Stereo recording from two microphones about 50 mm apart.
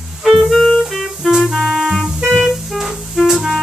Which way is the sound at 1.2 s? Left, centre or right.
Centre.